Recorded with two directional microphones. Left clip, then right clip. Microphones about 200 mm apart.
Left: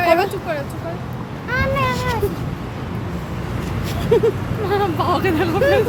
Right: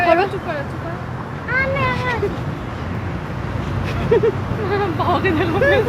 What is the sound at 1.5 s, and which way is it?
Vehicle, 20° left (ahead or behind).